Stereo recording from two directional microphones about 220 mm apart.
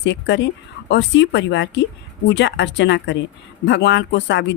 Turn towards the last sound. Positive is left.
turn(degrees=55)  # may be behind; listen again after turning